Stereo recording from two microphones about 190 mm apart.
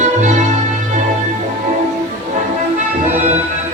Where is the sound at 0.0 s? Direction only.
40° right (ahead or behind).